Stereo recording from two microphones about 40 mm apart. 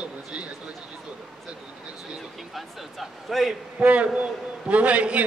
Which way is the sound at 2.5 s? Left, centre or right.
Centre.